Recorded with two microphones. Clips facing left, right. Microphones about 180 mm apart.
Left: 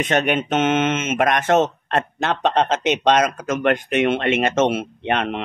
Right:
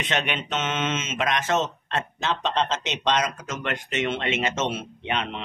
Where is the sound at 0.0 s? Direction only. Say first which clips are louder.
Left 8 dB; 45° left (ahead or behind).